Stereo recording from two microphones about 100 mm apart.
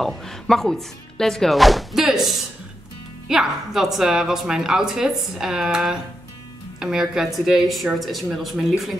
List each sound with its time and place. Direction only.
0.0 s a woman's voice: 5° left (ahead or behind)